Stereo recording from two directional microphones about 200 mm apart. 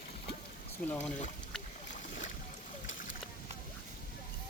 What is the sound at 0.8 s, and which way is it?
Speech, 45° left (ahead or behind).